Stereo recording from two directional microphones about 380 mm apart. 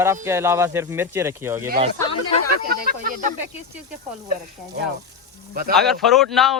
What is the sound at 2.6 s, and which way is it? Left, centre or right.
Speech, right.